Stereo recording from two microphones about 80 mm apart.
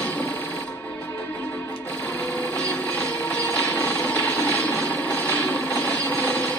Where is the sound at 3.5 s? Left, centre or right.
Centre.